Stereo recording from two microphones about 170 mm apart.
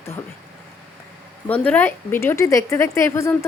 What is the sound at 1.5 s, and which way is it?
A woman's voice, 10° left (ahead or behind).